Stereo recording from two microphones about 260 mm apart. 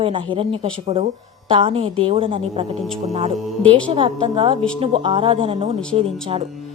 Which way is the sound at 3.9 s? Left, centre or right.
Centre.